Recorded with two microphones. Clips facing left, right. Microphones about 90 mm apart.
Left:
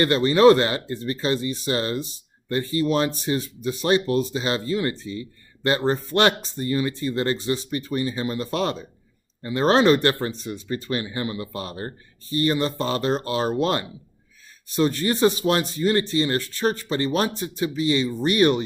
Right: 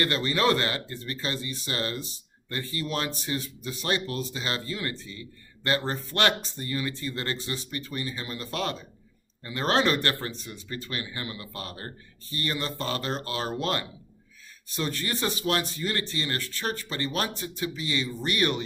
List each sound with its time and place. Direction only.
0.0 s speech: 25° left (ahead or behind)